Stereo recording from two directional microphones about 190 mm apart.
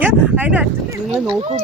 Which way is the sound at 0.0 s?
5° right (ahead or behind).